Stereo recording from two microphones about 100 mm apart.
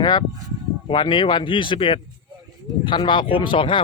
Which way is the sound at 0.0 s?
50° left (ahead or behind).